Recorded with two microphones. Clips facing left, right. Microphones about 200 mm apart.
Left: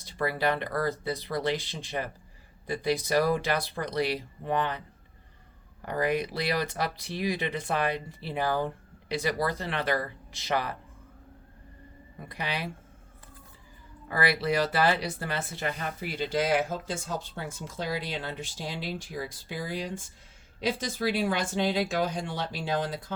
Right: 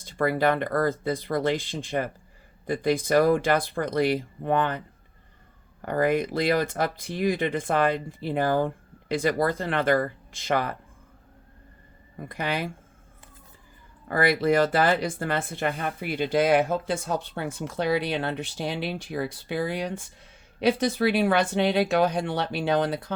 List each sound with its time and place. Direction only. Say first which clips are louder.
0.0 s speech: right 5 dB; 50° right (ahead or behind)
5.8 s speech: right 5 dB; 50° right (ahead or behind)
12.3 s speech: right 5 dB; 50° right (ahead or behind)
14.1 s speech: right 5 dB; 50° right (ahead or behind)